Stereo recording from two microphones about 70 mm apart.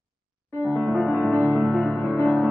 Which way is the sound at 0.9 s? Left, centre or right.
Centre.